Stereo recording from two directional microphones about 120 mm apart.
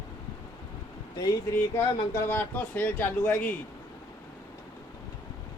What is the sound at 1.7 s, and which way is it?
Speech, 20° left (ahead or behind).